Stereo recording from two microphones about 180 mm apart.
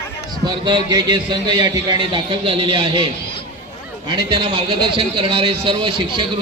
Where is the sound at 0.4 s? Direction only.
25° right (ahead or behind).